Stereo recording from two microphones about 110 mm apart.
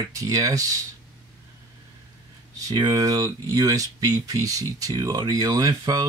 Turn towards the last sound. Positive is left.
turn(degrees=-35)  # may be behind; listen again after turning